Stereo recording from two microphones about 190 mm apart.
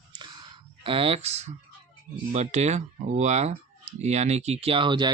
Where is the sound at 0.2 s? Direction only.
25° right (ahead or behind).